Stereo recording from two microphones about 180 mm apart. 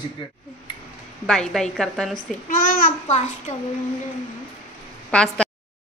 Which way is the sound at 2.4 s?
50° left (ahead or behind).